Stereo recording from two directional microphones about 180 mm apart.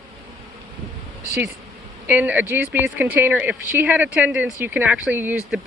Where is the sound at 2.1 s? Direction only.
10° right (ahead or behind).